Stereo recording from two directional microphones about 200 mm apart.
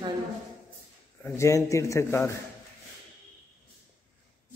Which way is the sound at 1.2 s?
15° left (ahead or behind).